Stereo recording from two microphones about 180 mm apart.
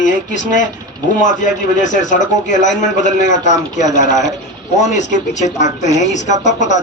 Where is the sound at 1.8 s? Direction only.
45° left (ahead or behind).